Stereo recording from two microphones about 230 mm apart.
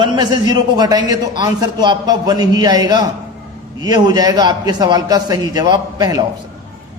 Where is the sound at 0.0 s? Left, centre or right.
Centre.